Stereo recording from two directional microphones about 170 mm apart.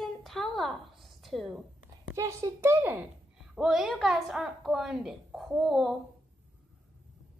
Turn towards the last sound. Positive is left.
turn(degrees=0)  # may be behind; listen again after turning